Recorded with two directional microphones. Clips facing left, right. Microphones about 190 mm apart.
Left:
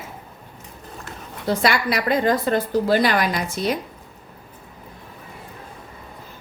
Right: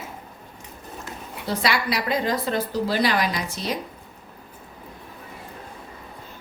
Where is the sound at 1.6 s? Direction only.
50° left (ahead or behind).